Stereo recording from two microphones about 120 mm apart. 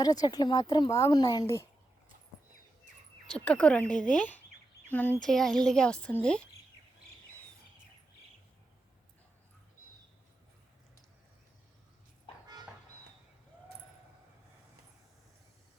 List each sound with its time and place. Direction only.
0.0 s speech: 35° left (ahead or behind)
3.2 s speech: 10° left (ahead or behind)
5.2 s a woman's voice: 5° left (ahead or behind)